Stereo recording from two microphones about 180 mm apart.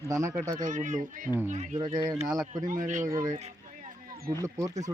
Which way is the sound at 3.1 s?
20° right (ahead or behind).